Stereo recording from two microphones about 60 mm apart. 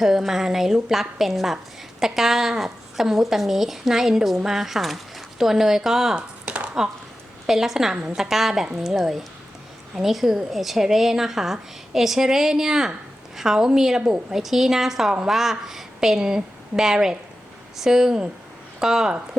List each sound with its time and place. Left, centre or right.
0.0 s a woman's voice: centre
6.1 s a sound: right
7.4 s a woman's voice: centre